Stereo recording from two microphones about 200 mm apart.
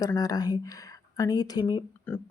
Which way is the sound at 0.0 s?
20° left (ahead or behind).